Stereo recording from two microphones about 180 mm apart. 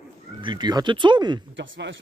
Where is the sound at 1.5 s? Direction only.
90° right.